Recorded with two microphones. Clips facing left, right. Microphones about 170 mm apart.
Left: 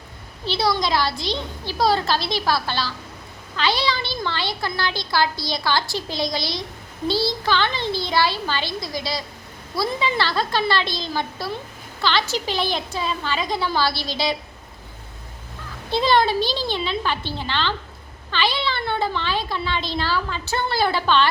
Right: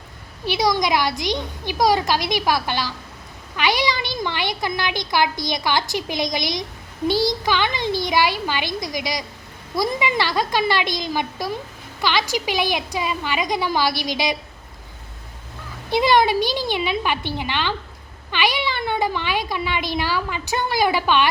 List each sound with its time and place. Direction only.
0.4 s speech: 15° right (ahead or behind)
15.9 s speech: 15° right (ahead or behind)